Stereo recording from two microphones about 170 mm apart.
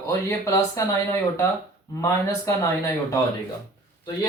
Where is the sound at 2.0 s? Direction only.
20° left (ahead or behind).